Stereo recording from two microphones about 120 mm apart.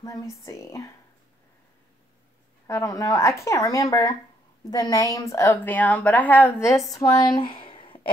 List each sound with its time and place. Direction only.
0.0 s a woman's voice: 25° left (ahead or behind)
2.6 s a woman's voice: 25° left (ahead or behind)
6.9 s a woman's voice: 30° left (ahead or behind)
7.3 s a sound: 45° left (ahead or behind)